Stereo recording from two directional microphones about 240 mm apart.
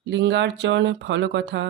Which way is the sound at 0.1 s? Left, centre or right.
Right.